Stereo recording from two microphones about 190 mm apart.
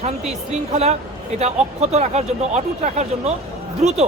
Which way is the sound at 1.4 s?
35° right (ahead or behind).